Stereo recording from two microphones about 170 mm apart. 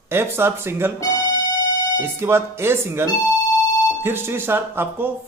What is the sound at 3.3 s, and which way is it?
Music, 20° left (ahead or behind).